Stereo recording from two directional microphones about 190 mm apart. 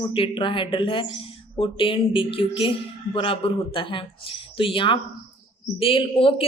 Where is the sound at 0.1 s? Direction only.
25° left (ahead or behind).